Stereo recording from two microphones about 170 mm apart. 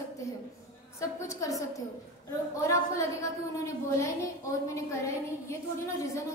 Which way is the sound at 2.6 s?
15° left (ahead or behind).